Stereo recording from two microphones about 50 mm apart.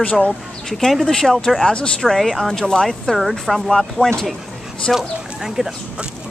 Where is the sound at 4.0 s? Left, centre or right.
Left.